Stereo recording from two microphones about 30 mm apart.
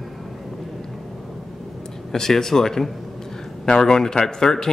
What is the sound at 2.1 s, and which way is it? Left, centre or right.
Speech, centre.